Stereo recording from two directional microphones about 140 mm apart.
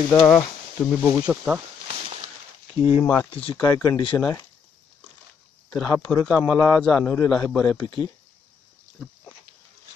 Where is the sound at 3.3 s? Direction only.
40° left (ahead or behind).